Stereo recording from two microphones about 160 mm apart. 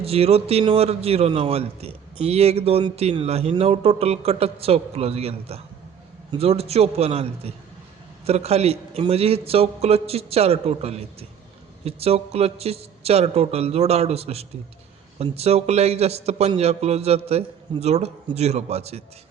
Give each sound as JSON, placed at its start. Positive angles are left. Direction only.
{"t": 0.0, "sound": "a man's voice", "side_deg": -40}